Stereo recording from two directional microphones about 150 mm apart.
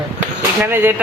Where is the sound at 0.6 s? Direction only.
15° right (ahead or behind).